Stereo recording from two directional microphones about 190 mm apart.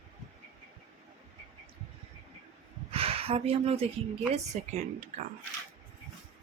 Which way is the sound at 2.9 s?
30° right (ahead or behind).